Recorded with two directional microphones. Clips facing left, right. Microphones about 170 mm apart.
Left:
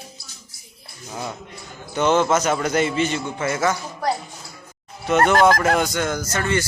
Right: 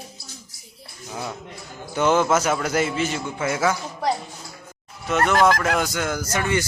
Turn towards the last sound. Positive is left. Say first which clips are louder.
# left 1 dB
turn(degrees=-15)  # may be behind; listen again after turning